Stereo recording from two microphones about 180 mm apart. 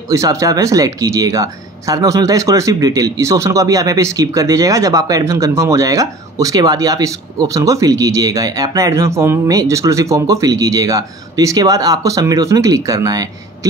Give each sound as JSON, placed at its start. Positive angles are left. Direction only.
{"t": 0.1, "sound": "speech", "side_deg": -15}